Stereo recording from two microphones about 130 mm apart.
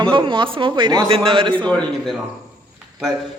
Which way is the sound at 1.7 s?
5° left (ahead or behind).